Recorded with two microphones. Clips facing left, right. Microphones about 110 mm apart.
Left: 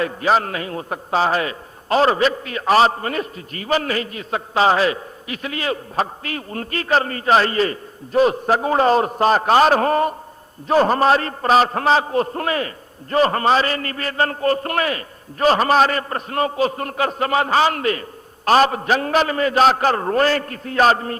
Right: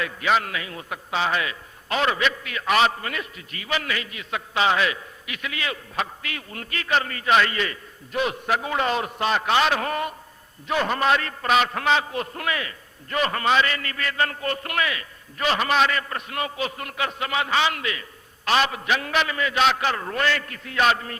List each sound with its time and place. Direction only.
0.0 s a man's voice: 35° left (ahead or behind)